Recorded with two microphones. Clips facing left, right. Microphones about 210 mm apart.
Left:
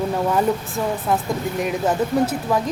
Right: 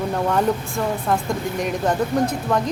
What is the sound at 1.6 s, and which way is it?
A woman's voice, 5° left (ahead or behind).